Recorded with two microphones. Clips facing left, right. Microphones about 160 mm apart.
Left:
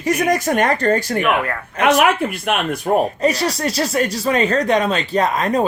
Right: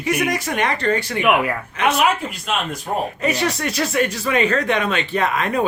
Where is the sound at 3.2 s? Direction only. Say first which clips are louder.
Left 3 dB; 35° left (ahead or behind).